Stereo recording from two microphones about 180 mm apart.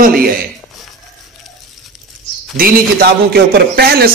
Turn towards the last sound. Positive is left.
turn(degrees=-60)  # may be behind; listen again after turning